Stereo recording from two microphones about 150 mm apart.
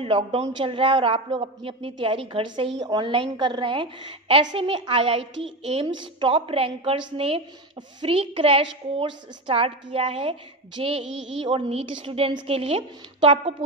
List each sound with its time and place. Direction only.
0.0 s a woman's voice: 40° right (ahead or behind)